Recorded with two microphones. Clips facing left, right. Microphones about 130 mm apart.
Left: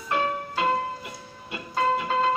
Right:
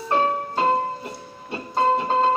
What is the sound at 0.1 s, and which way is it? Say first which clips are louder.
Music: right 5 dB; 35° right (ahead or behind).